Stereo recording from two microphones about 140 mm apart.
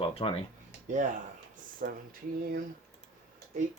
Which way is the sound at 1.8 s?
90° right.